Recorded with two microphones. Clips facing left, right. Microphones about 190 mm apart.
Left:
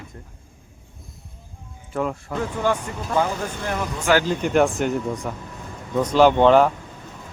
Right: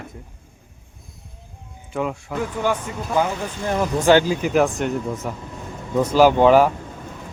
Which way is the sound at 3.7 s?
30° right (ahead or behind).